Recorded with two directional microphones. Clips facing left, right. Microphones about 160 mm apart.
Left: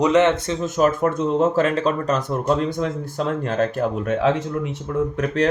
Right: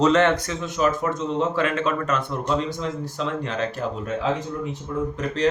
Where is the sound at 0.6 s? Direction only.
45° left (ahead or behind); by 4.8 s 75° left (ahead or behind).